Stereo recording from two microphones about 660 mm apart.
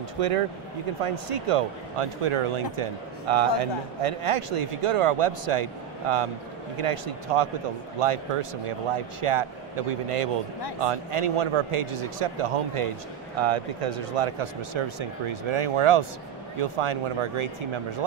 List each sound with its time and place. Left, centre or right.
1.0 s speech: right